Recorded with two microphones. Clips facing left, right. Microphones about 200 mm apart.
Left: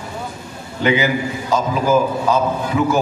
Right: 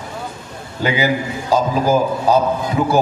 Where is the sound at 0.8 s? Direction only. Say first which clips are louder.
Left 1 dB; 35° right (ahead or behind).